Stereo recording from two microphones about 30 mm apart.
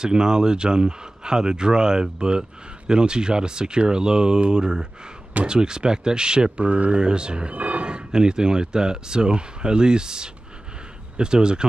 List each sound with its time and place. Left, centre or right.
0.0 s speech: right
6.6 s speech: right
7.0 s speech: right
7.5 s speech: right